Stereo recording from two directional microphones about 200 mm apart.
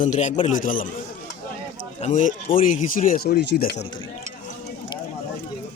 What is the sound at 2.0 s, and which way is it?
Speech, 35° left (ahead or behind).